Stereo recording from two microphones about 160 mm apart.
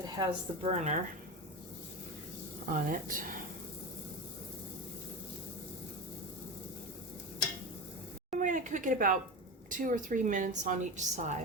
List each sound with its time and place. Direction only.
0.2 s a woman's voice: 40° right (ahead or behind)
2.7 s speech: 60° right (ahead or behind)
8.3 s a woman's voice: 55° right (ahead or behind)